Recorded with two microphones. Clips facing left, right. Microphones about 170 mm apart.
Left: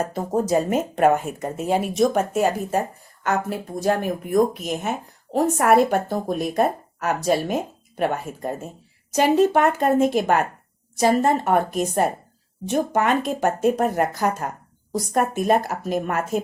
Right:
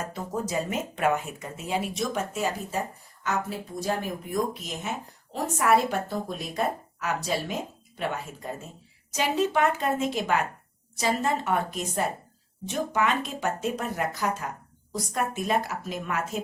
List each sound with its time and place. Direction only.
0.0 s speech: 40° left (ahead or behind)